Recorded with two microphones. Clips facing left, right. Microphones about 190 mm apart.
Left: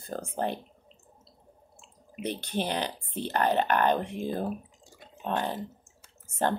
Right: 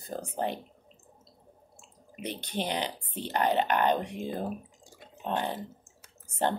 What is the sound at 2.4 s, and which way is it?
A woman's voice, 15° right (ahead or behind).